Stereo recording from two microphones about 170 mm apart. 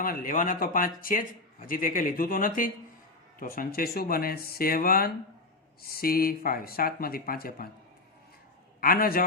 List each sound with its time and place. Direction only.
0.0 s speech: 55° left (ahead or behind)
8.8 s speech: 60° left (ahead or behind)